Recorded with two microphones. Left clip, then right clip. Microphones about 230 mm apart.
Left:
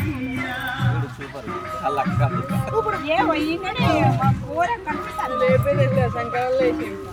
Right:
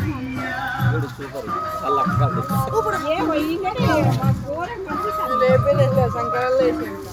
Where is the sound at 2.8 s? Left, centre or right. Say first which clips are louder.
Right 1 dB; centre.